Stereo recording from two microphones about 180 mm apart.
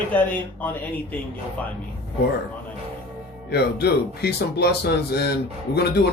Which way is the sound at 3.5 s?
65° left (ahead or behind).